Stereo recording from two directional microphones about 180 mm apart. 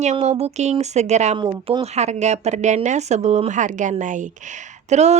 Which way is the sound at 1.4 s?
25° right (ahead or behind).